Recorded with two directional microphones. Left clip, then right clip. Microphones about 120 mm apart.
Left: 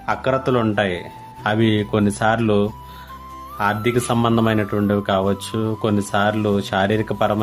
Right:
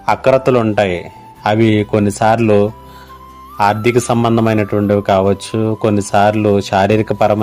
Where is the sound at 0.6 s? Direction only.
35° right (ahead or behind).